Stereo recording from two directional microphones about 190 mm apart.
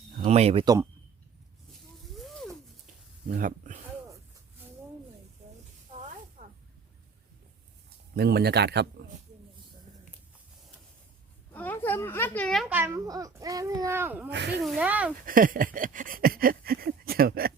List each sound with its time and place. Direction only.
0.3 s speech: 35° right (ahead or behind)
0.6 s speech: 20° right (ahead or behind)
3.2 s a sound: 45° right (ahead or behind)
6.0 s snake: 35° right (ahead or behind)
8.1 s speech: 55° right (ahead or behind)
11.5 s speech: 10° left (ahead or behind)
12.6 s a child's voice: 10° right (ahead or behind)
14.3 s speech: 65° right (ahead or behind)
14.6 s speech: 5° right (ahead or behind)
15.3 s a sound: 45° right (ahead or behind)